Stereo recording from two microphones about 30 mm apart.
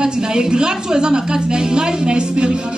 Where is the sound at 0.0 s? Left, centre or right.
Right.